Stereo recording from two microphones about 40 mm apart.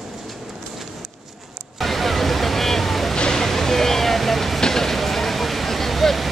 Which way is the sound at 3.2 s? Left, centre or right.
Centre.